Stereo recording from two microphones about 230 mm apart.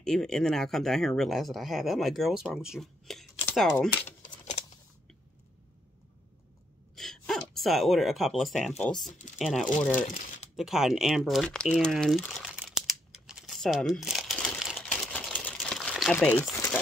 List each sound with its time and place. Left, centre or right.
0.0 s speech: centre
4.0 s a sound: left
7.0 s speech: centre
9.9 s speech: left
10.5 s crumpling: centre